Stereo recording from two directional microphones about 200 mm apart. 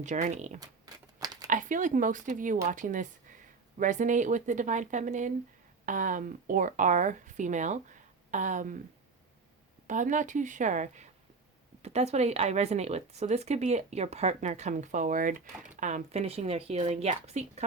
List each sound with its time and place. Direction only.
0.0 s speech: 35° right (ahead or behind)
0.6 s a sound: 20° right (ahead or behind)
1.5 s speech: 40° right (ahead or behind)
9.8 s speech: 40° right (ahead or behind)